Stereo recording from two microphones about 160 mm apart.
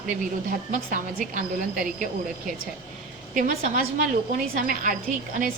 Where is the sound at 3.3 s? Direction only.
60° right (ahead or behind).